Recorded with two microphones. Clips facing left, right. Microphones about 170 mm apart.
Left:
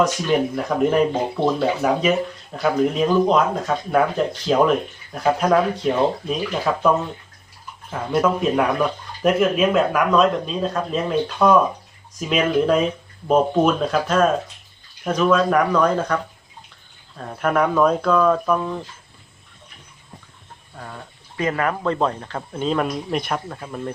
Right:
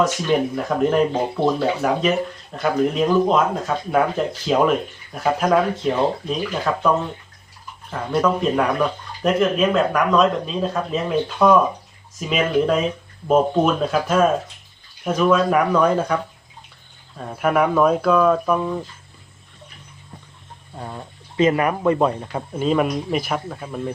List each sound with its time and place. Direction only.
0.0 s speech: centre (ahead or behind)
20.7 s speech: 25° right (ahead or behind); by 23.9 s 5° right (ahead or behind)